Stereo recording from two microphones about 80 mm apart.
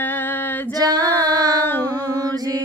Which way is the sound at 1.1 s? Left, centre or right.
Right.